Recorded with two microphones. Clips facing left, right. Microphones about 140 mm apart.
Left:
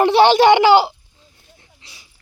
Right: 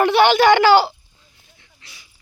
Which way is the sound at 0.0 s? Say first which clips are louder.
Left 2 dB; 30° left (ahead or behind).